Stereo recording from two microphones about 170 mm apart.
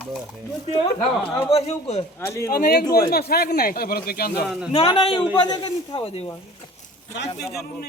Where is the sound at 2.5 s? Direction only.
60° left (ahead or behind).